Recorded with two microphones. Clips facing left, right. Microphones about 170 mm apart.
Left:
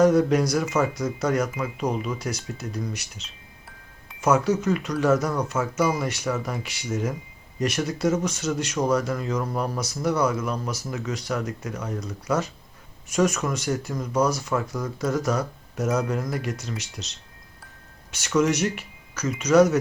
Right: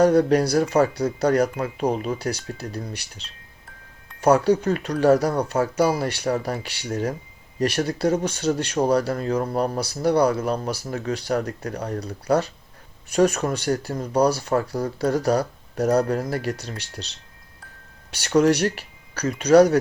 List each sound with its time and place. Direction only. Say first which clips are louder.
0.0 s speech: right 2 dB; 35° right (ahead or behind)
18.1 s speech: right 4 dB; 35° right (ahead or behind)